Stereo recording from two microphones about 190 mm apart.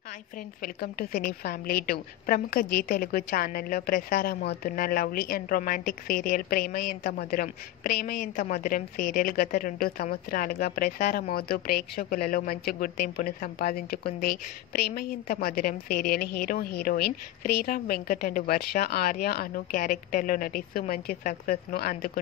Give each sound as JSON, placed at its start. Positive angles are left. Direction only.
{"t": 0.6, "sound": "a woman's voice", "side_deg": 50}